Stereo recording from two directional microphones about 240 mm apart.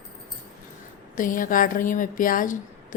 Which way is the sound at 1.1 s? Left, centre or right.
Left.